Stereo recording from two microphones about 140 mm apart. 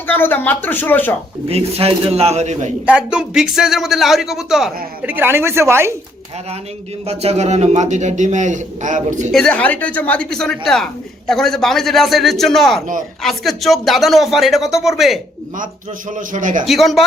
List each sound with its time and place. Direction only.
0.1 s speech: 15° left (ahead or behind)
1.5 s a man's voice: 45° right (ahead or behind)
2.8 s speech: 5° right (ahead or behind)
7.1 s a man's voice: 50° right (ahead or behind)
9.3 s speech: 5° left (ahead or behind)
16.1 s a man's voice: 65° right (ahead or behind)
16.6 s speech: centre (ahead or behind)